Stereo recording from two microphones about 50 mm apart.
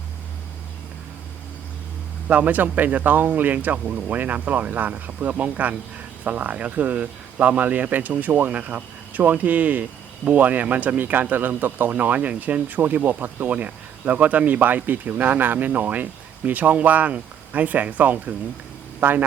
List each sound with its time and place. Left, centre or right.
2.2 s speech: right